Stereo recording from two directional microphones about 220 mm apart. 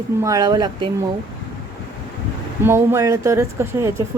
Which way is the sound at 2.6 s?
10° right (ahead or behind).